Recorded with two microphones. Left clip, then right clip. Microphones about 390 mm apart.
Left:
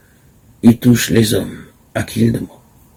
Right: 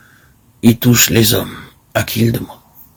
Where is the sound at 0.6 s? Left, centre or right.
Right.